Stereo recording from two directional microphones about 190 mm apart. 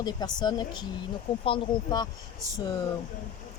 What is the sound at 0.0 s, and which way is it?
Speech, 20° left (ahead or behind).